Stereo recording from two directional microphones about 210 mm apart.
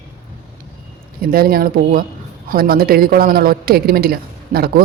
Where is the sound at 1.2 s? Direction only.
45° right (ahead or behind).